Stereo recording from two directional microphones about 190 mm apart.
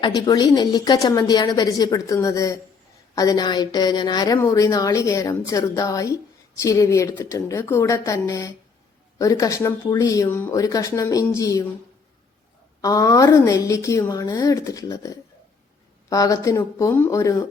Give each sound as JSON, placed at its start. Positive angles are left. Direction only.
{"t": 0.0, "sound": "a woman's voice", "side_deg": 20}
{"t": 12.8, "sound": "a woman's voice", "side_deg": 20}